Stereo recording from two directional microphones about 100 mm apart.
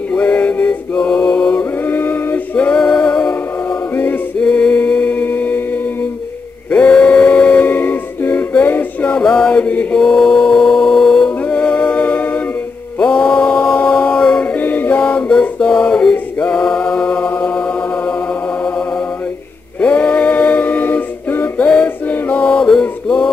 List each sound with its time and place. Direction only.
0.1 s music: 15° left (ahead or behind)
6.7 s music: 10° left (ahead or behind)
14.6 s music: 15° left (ahead or behind)
19.8 s a capella: 15° left (ahead or behind)